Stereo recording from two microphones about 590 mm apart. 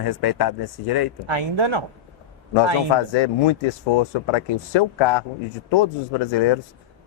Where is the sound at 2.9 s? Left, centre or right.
Left.